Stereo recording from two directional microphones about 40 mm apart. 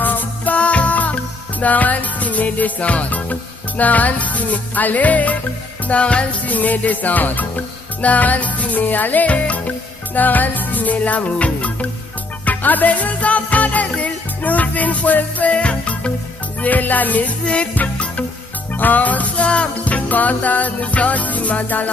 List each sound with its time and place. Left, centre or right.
0.0 s music: left
0.6 s music: left
6.4 s music: left
16.6 s music: left